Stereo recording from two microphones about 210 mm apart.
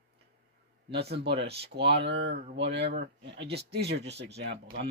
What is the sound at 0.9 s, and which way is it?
Speech, 50° right (ahead or behind).